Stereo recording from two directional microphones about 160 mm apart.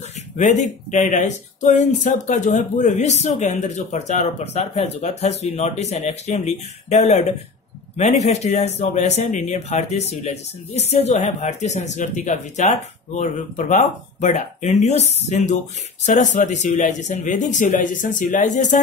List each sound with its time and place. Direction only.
0.4 s speech: 50° left (ahead or behind)